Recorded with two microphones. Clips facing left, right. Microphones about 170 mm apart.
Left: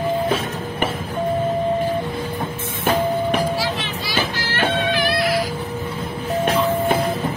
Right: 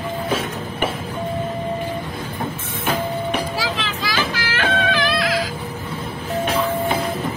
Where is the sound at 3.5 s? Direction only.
90° right.